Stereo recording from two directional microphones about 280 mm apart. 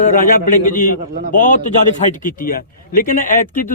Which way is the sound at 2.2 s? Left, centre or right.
Left.